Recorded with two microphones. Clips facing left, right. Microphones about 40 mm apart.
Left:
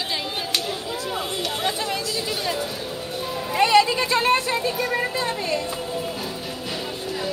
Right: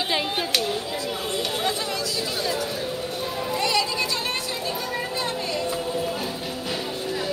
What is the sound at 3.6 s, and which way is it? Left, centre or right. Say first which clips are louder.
Children playing: left 8 dB; left.